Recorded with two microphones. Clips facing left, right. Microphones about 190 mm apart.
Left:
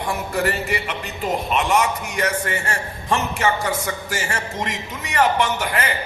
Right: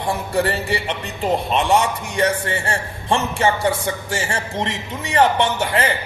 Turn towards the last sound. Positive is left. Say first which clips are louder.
# right 3 dB
turn(degrees=-30)  # may be behind; listen again after turning